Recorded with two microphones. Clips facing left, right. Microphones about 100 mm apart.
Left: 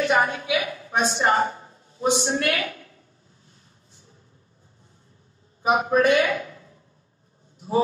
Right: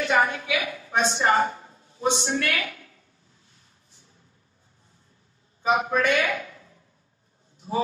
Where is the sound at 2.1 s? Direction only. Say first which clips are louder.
Left 3 dB; 35° left (ahead or behind).